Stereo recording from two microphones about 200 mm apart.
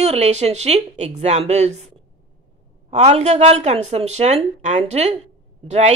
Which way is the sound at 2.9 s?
35° right (ahead or behind).